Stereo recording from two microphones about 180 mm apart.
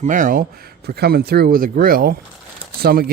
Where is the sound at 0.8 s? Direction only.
65° right (ahead or behind).